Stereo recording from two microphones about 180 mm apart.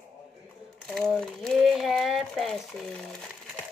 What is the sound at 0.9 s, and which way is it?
Speech, 5° left (ahead or behind).